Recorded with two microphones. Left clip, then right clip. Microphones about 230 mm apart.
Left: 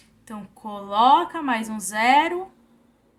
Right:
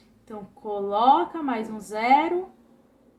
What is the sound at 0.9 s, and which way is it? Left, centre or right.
A woman's voice, left.